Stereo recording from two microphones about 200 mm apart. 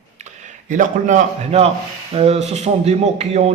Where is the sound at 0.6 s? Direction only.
40° right (ahead or behind).